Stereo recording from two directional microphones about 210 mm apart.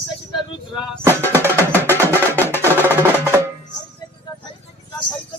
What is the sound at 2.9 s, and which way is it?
Percussion, 10° right (ahead or behind).